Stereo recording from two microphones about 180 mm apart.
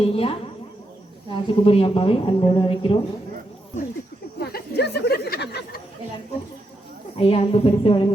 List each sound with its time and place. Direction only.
0.0 s speech: 30° left (ahead or behind)
4.4 s speech: 60° left (ahead or behind)
7.2 s speech: 35° left (ahead or behind)